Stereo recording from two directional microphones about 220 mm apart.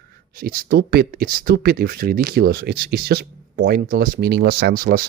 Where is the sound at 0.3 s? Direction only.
40° right (ahead or behind).